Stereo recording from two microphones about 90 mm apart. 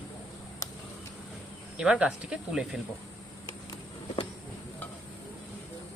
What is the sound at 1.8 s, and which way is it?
Speech, 10° right (ahead or behind).